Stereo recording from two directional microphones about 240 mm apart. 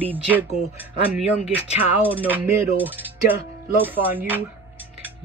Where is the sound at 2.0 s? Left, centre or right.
Centre.